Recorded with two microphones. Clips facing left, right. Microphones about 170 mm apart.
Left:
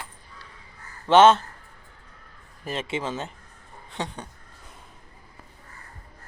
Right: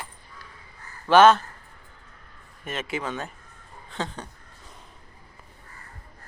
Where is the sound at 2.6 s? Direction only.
30° left (ahead or behind).